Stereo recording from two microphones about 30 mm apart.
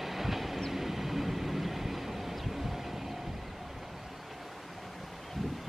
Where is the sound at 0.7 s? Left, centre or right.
Centre.